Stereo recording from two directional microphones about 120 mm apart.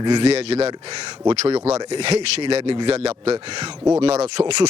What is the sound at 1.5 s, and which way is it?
Speech, 60° right (ahead or behind).